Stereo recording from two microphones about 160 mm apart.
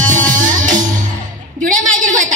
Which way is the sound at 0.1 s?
55° right (ahead or behind).